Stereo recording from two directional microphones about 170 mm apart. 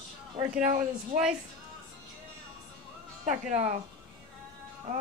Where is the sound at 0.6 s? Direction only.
45° right (ahead or behind).